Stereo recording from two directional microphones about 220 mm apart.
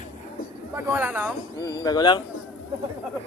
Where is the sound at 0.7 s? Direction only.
5° right (ahead or behind).